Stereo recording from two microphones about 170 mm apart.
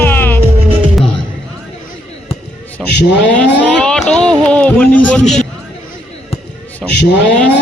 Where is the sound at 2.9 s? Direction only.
80° left.